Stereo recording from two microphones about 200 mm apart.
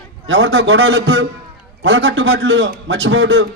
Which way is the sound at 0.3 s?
70° right (ahead or behind).